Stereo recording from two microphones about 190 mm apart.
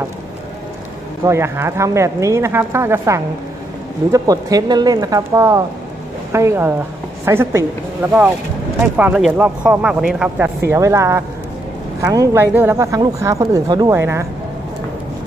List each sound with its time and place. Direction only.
1.2 s speech: 15° right (ahead or behind)
10.6 s speech: 15° right (ahead or behind)